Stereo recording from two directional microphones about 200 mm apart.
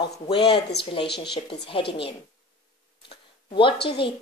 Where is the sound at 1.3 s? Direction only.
25° left (ahead or behind).